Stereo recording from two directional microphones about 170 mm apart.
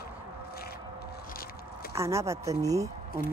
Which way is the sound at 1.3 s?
60° left (ahead or behind).